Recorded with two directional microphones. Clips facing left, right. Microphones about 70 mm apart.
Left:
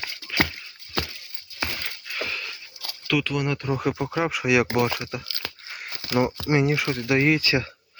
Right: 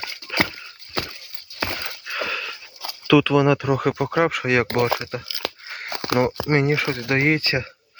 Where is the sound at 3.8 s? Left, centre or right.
Right.